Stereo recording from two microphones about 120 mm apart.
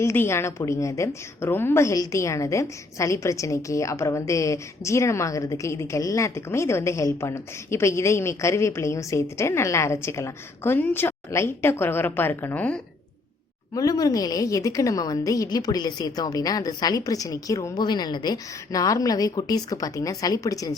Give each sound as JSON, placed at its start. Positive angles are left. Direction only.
{"t": 0.0, "sound": "a woman's voice", "side_deg": 20}
{"t": 13.7, "sound": "a woman's voice", "side_deg": 30}
{"t": 17.8, "sound": "a woman's voice", "side_deg": 35}